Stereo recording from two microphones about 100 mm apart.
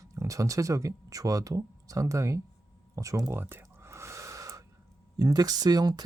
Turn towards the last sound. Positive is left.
turn(degrees=-40)  # may be behind; listen again after turning